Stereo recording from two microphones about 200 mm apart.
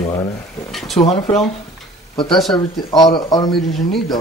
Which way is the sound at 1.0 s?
30° left (ahead or behind).